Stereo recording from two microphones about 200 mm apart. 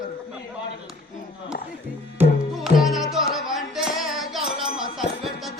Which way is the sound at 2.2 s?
Centre (ahead or behind).